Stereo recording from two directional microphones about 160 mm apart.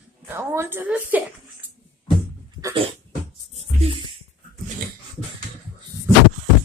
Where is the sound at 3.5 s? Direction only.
40° right (ahead or behind).